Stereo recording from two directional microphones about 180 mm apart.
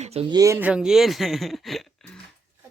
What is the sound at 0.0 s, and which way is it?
Speech, 35° right (ahead or behind).